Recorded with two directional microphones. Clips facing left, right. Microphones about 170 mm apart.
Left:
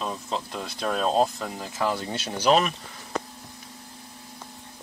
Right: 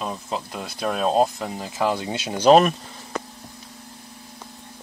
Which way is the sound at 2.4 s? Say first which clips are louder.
Right 7 dB; 50° right (ahead or behind).